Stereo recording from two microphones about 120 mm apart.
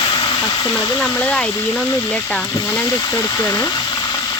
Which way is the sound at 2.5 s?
25° left (ahead or behind).